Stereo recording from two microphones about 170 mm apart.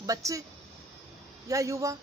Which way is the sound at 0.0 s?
20° right (ahead or behind).